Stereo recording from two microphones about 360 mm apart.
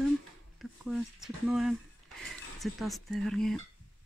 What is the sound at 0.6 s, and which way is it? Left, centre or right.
Speech, centre.